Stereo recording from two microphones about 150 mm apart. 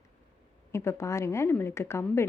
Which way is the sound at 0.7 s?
20° left (ahead or behind).